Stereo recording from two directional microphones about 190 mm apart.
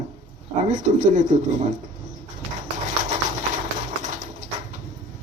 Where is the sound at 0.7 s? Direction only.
40° right (ahead or behind).